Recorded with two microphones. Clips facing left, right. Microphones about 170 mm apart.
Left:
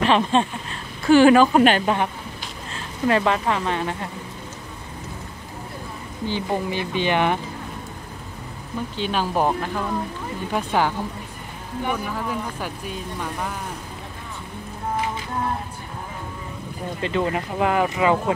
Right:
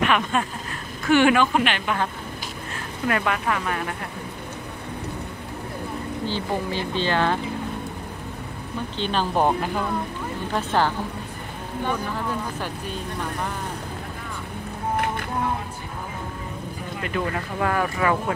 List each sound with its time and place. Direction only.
0.0 s speech: 30° left (ahead or behind)
3.1 s speech: 25° left (ahead or behind)
6.2 s speech: 15° left (ahead or behind)
8.9 s speech: 10° left (ahead or behind)
9.5 s speech: 5° right (ahead or behind)
10.5 s speech: 10° left (ahead or behind)
17.0 s speech: 20° left (ahead or behind)